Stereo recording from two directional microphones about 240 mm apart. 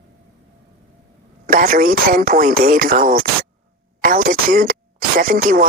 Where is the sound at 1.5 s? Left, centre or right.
Right.